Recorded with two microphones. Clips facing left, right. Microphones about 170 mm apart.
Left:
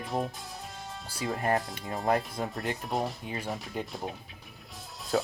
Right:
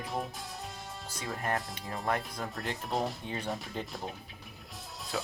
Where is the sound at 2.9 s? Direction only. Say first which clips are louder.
Left 1 dB; centre (ahead or behind).